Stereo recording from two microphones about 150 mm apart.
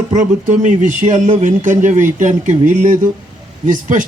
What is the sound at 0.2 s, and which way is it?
Speech, 55° right (ahead or behind).